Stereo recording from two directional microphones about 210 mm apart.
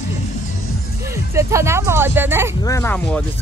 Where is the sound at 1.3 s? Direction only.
15° right (ahead or behind).